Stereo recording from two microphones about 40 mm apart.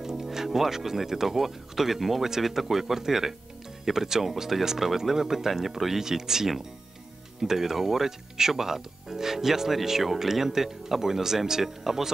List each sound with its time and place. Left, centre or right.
0.0 s music: centre
0.5 s speech: centre